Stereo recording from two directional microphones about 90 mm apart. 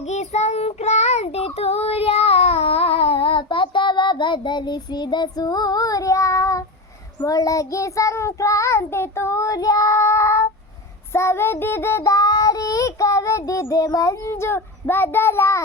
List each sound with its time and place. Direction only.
1.4 s child singing: 90° left; by 12.1 s 25° left (ahead or behind)
12.1 s child singing: 40° left (ahead or behind)